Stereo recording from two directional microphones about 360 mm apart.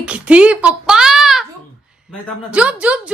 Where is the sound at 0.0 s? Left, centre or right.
Centre.